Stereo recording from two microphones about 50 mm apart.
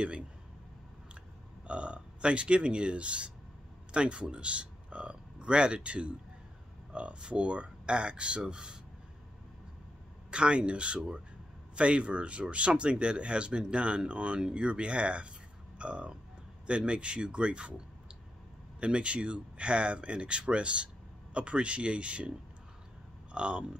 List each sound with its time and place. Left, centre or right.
1.7 s speech: right
10.3 s speech: centre
23.3 s speech: right